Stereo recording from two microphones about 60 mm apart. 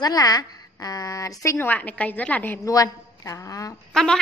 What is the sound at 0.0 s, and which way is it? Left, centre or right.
A woman's voice, left.